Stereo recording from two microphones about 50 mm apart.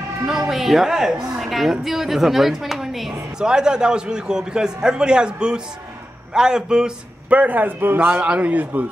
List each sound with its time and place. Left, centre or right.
0.3 s a man's voice: centre
7.2 s a man's voice: right